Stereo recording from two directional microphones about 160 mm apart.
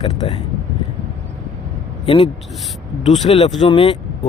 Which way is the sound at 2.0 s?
35° left (ahead or behind).